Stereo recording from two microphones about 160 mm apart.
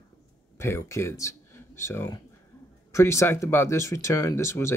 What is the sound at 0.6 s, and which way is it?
Speech, 15° left (ahead or behind).